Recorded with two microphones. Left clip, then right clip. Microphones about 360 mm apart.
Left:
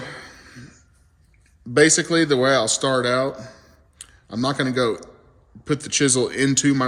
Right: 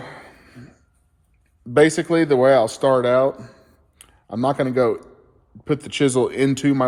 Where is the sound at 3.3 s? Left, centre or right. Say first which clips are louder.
Left 3 dB; left.